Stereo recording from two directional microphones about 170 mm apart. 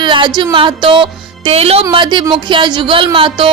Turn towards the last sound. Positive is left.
turn(degrees=-30)  # may be behind; listen again after turning